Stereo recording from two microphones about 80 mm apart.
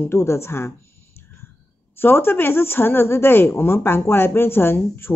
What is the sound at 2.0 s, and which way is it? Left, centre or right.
A woman's voice, left.